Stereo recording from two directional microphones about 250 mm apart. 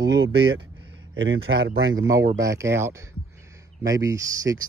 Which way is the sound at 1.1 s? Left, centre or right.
Right.